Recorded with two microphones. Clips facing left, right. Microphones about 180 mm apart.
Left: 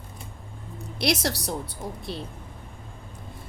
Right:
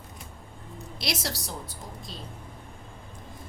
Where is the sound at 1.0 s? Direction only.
60° left (ahead or behind).